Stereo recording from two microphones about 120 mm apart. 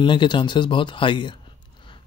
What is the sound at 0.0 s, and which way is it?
Speech, 40° left (ahead or behind).